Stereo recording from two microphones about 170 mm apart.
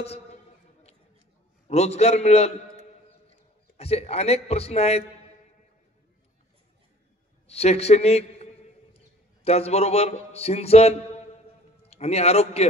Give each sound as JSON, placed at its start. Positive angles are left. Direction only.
{"t": 1.7, "sound": "a man's voice", "side_deg": 40}
{"t": 7.4, "sound": "a man's voice", "side_deg": 40}